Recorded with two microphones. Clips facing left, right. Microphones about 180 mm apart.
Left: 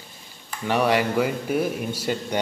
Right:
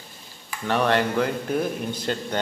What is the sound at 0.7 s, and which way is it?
A man's voice, 10° left (ahead or behind).